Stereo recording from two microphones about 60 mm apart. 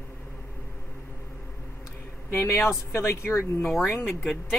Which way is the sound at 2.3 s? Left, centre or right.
Left.